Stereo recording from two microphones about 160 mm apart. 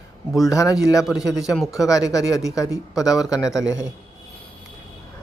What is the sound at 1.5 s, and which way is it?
Speech, centre (ahead or behind).